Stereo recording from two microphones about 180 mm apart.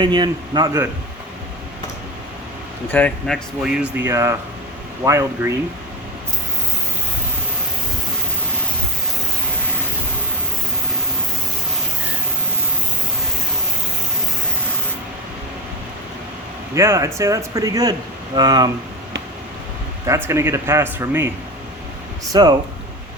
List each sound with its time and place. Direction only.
0.0 s a man's voice: 25° right (ahead or behind)
2.9 s speech: 5° left (ahead or behind); by 5.5 s 15° right (ahead or behind)
16.7 s a man's voice: 15° right (ahead or behind)
20.1 s speech: 15° right (ahead or behind)
22.3 s a man's voice: 20° right (ahead or behind)